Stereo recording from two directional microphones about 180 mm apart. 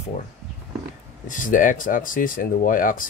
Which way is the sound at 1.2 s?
45° left (ahead or behind).